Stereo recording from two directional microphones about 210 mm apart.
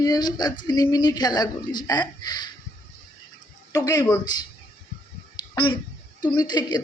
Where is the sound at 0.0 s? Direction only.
20° left (ahead or behind).